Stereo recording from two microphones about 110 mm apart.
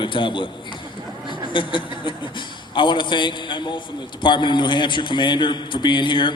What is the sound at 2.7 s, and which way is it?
A man's voice, 45° left (ahead or behind).